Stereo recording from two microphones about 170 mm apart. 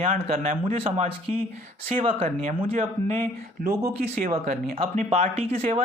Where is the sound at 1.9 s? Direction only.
40° right (ahead or behind).